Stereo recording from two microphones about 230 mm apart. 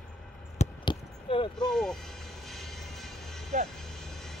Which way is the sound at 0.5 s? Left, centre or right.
Left.